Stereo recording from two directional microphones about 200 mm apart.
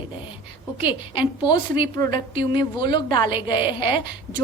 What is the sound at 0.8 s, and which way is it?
A woman's voice, 25° left (ahead or behind).